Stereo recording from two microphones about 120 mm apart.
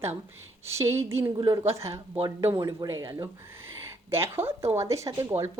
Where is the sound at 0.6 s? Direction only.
25° right (ahead or behind).